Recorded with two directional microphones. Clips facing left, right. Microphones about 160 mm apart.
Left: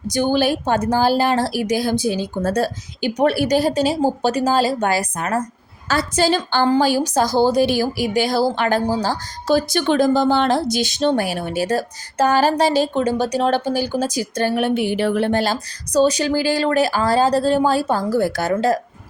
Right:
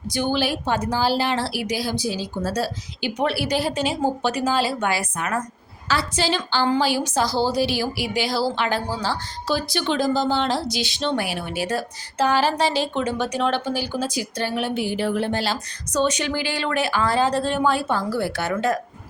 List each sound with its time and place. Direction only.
0.1 s a woman's voice: 45° left (ahead or behind)
15.9 s speech: 35° left (ahead or behind)